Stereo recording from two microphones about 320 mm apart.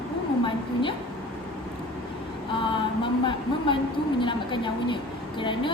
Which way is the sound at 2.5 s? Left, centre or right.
Centre.